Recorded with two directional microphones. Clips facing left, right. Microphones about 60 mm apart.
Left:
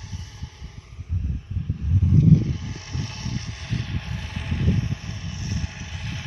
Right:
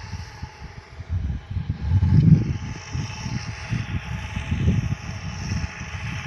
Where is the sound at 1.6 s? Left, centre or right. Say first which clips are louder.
Even; right.